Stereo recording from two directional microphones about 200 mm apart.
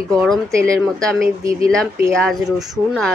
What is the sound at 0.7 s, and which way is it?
A woman's voice, 5° left (ahead or behind).